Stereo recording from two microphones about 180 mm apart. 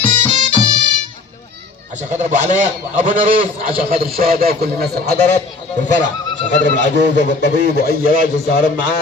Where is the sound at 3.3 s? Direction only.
30° right (ahead or behind).